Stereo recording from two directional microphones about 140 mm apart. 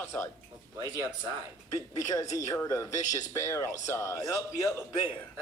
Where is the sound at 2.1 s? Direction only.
25° left (ahead or behind).